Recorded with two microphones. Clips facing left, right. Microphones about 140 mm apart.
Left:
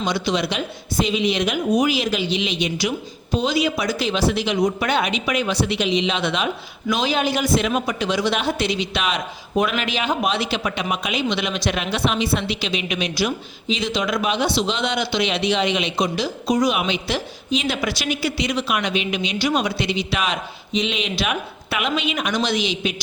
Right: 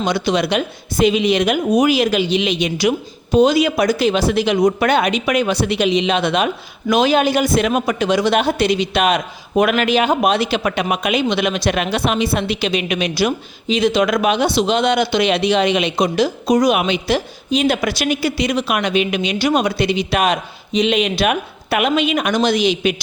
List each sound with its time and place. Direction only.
0.0 s a man's voice: 55° right (ahead or behind)